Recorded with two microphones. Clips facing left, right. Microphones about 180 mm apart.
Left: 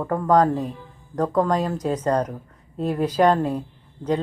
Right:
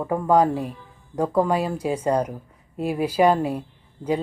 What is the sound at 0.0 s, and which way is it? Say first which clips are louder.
Speech: even; 10° right (ahead or behind).